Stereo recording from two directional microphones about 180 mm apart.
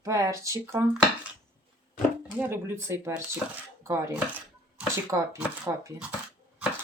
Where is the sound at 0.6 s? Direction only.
15° right (ahead or behind).